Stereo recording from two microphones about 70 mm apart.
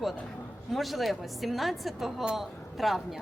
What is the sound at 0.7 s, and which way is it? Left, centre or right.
A woman's voice, centre.